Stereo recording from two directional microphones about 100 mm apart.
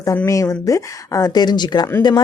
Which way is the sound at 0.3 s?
35° left (ahead or behind).